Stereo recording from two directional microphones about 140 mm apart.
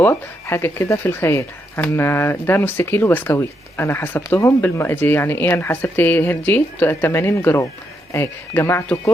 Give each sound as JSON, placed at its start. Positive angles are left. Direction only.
{"t": 0.0, "sound": "speech", "side_deg": 15}